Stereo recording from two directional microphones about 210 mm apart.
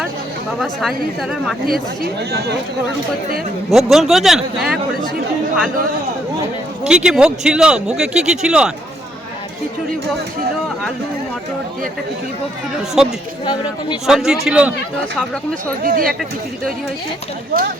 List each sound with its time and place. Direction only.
0.6 s a man's voice: centre (ahead or behind)
1.6 s speech: 45° right (ahead or behind)
3.7 s a man's voice: centre (ahead or behind)
6.8 s a man's voice: 5° right (ahead or behind)
12.9 s a man's voice: centre (ahead or behind)
15.8 s speech: 45° right (ahead or behind)